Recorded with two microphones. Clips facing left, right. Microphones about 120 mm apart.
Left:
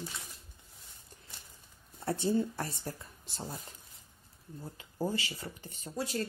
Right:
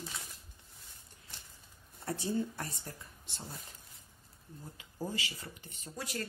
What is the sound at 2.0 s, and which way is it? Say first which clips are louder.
Speech: left 4 dB; 30° left (ahead or behind).